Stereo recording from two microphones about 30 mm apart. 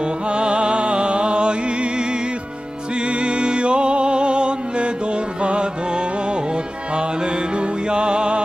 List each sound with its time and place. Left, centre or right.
0.0 s music: right